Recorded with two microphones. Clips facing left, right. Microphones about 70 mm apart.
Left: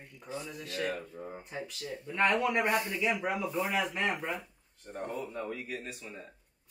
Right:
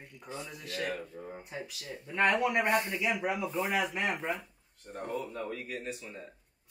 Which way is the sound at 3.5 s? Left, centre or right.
Right.